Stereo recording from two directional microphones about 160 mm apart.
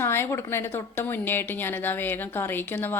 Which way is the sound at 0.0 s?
15° left (ahead or behind).